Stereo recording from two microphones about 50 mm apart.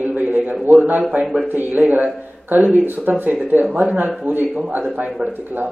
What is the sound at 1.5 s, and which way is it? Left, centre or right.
A man's voice, right.